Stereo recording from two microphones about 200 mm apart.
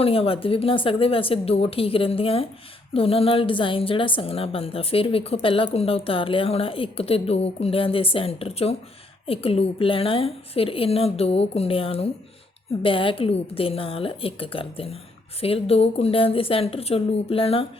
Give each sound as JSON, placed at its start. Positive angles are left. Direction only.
{"t": 0.0, "sound": "a woman's voice", "side_deg": 30}